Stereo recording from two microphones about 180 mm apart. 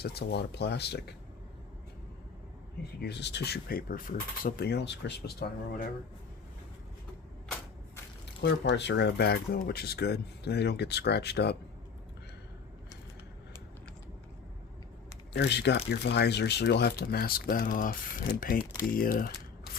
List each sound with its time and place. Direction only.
0.0 s speech: 65° left (ahead or behind)
3.0 s speech: 70° left (ahead or behind)
8.4 s speech: 70° left (ahead or behind)
15.3 s speech: 70° left (ahead or behind); by 19.3 s 50° left (ahead or behind)